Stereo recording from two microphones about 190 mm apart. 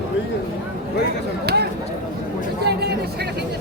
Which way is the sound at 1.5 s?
55° right (ahead or behind).